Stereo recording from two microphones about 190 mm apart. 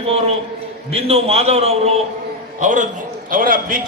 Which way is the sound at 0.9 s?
30° right (ahead or behind).